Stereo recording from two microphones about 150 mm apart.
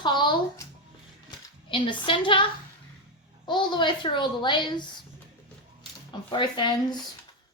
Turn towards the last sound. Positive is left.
turn(degrees=30)  # may be behind; listen again after turning